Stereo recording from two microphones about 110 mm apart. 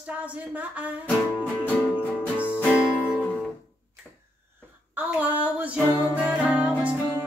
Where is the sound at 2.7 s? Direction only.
15° left (ahead or behind).